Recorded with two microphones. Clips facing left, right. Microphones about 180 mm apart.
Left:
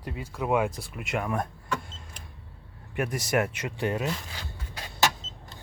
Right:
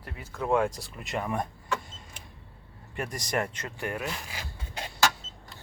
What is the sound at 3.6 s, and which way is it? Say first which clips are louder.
Speech: left 5 dB; 20° left (ahead or behind).